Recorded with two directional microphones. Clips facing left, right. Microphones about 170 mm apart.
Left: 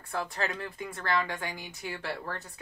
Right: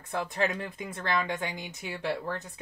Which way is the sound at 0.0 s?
20° right (ahead or behind).